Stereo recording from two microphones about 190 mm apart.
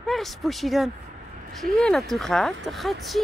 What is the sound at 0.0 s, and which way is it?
Speech, centre (ahead or behind).